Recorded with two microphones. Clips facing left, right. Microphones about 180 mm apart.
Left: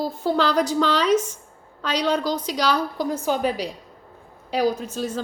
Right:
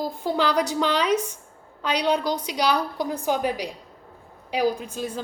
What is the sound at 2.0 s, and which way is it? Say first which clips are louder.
A woman's voice: left 1 dB; 15° right (ahead or behind).